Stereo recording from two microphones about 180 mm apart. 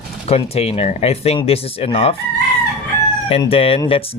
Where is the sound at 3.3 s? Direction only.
30° left (ahead or behind).